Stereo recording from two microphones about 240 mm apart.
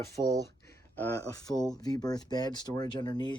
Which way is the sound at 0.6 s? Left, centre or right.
Centre.